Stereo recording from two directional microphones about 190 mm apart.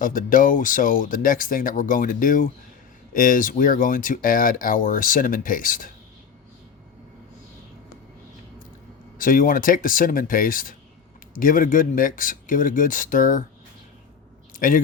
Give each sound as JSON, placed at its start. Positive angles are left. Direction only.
{"t": 0.0, "sound": "speech", "side_deg": 45}
{"t": 9.1, "sound": "speech", "side_deg": 45}
{"t": 14.6, "sound": "speech", "side_deg": 45}